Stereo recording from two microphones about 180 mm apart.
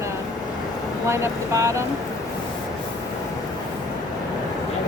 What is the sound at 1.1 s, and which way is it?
Speech, 15° right (ahead or behind).